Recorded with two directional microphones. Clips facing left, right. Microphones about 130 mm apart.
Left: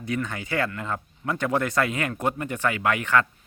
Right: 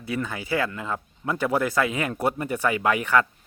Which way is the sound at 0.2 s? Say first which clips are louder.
Right 4 dB; 5° right (ahead or behind).